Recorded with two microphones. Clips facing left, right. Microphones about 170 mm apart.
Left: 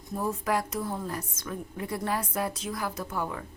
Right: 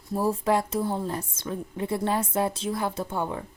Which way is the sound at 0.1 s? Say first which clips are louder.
Right 5 dB; 30° right (ahead or behind).